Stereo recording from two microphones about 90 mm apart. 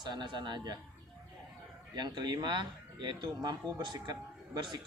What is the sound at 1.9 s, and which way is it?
A man's voice, 50° right (ahead or behind).